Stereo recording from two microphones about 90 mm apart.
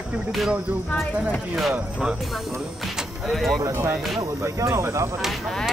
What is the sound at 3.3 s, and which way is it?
Speech, 5° left (ahead or behind).